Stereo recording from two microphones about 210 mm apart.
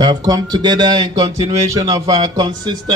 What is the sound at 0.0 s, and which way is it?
Speech, 20° right (ahead or behind).